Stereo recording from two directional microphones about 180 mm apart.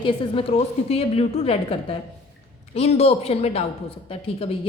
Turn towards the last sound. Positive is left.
turn(degrees=30)  # may be behind; listen again after turning